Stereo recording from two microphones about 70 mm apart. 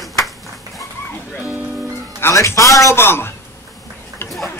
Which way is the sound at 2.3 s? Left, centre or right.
Left.